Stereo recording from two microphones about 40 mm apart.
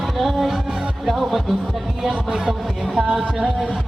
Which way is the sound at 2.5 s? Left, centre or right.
Centre.